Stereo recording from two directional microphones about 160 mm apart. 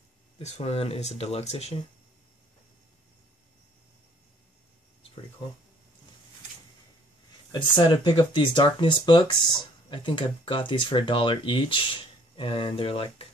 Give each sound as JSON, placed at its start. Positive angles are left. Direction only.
{"t": 0.4, "sound": "speech", "side_deg": 45}
{"t": 7.5, "sound": "speech", "side_deg": 30}